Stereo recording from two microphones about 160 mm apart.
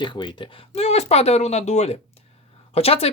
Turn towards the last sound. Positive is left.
turn(degrees=40)  # may be behind; listen again after turning